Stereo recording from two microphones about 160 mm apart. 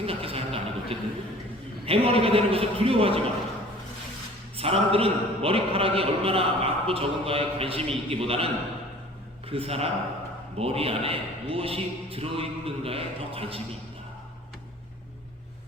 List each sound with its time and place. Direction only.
0.0 s a sound: 35° right (ahead or behind)
1.9 s a man's voice: 35° right (ahead or behind)
4.5 s a man's voice: 35° right (ahead or behind)
9.5 s a man's voice: 35° right (ahead or behind)